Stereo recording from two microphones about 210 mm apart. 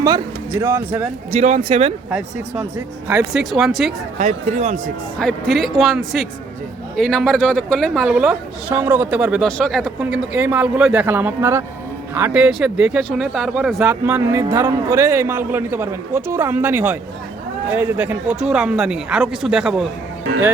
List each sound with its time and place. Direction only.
0.0 s speech: 15° right (ahead or behind)
1.3 s speech: 30° right (ahead or behind)
2.0 s a man's voice: centre (ahead or behind)
4.2 s speech: 30° right (ahead or behind)
5.2 s a man's voice: centre (ahead or behind)